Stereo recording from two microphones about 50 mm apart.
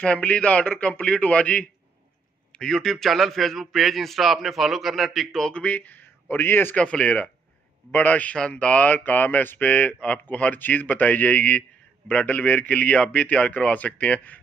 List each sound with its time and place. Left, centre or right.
0.0 s a man's voice: left
2.5 s a man's voice: centre
5.5 s speech: left
6.8 s a man's voice: left